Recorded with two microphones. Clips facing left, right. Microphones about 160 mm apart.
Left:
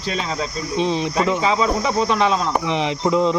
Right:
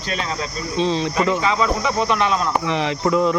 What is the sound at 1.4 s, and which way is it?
Speech, 30° left (ahead or behind).